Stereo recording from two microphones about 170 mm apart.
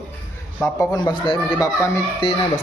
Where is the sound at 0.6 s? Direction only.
20° left (ahead or behind).